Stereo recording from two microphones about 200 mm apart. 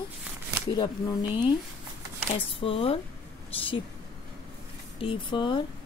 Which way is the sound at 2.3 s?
25° left (ahead or behind).